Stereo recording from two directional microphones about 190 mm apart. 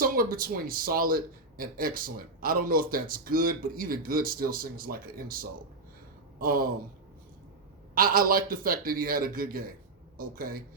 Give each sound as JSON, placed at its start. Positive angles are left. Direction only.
{"t": 0.0, "sound": "speech", "side_deg": -50}
{"t": 7.9, "sound": "speech", "side_deg": -50}